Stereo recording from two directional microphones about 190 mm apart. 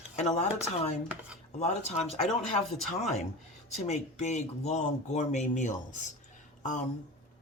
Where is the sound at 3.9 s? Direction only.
35° left (ahead or behind).